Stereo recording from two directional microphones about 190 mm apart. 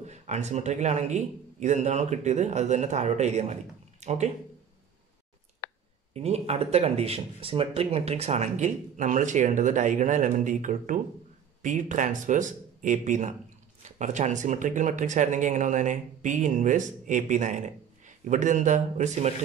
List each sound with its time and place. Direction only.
0.0 s speech: 35° right (ahead or behind)
6.1 s speech: 35° right (ahead or behind)